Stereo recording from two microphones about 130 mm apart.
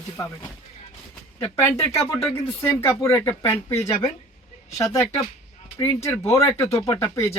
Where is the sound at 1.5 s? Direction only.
20° left (ahead or behind).